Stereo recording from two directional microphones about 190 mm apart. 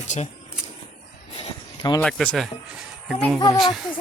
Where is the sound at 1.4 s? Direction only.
25° left (ahead or behind).